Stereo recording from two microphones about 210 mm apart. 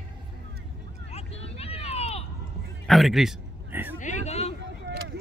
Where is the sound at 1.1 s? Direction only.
30° left (ahead or behind).